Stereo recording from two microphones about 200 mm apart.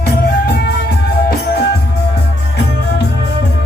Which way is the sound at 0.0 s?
50° left (ahead or behind).